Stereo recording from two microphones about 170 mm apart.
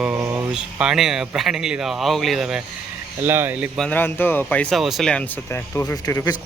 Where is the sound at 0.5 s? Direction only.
5° right (ahead or behind).